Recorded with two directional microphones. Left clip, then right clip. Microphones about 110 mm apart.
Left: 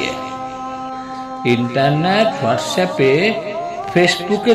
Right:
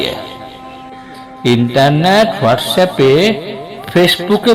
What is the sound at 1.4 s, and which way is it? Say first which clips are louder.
A man's voice: right 5 dB; 45° right (ahead or behind).